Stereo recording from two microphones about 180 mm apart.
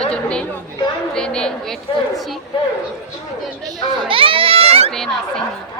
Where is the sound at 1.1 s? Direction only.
5° left (ahead or behind).